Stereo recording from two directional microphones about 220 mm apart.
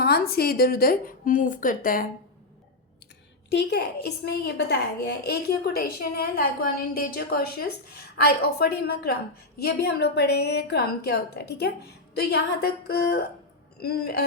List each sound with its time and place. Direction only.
0.0 s a woman's voice: 45° left (ahead or behind)
3.5 s a woman's voice: 50° left (ahead or behind)